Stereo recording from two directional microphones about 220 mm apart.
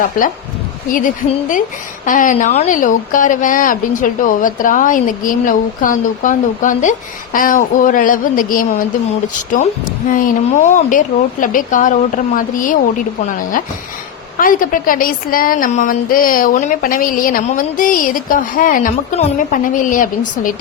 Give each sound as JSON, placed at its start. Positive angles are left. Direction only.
{"t": 0.9, "sound": "a woman's voice", "side_deg": 35}
{"t": 10.1, "sound": "a woman's voice", "side_deg": 35}